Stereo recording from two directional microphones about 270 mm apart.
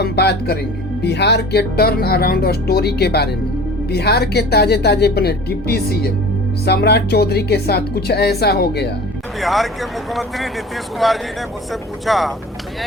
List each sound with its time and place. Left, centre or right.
0.0 s speech: left
9.4 s speech: centre